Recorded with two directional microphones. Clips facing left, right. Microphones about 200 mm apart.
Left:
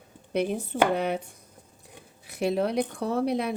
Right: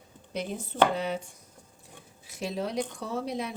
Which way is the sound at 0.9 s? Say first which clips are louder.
Left 4 dB; 60° left (ahead or behind).